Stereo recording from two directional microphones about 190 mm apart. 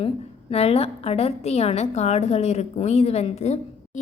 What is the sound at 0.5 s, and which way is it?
A woman's voice, 30° left (ahead or behind).